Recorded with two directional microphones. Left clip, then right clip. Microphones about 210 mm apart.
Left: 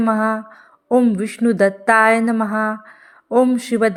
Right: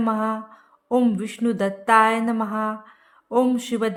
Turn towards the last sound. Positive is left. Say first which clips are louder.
# left 6 dB
turn(degrees=25)  # may be behind; listen again after turning